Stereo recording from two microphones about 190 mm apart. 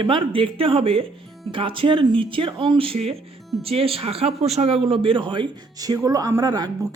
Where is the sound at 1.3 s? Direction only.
Centre (ahead or behind).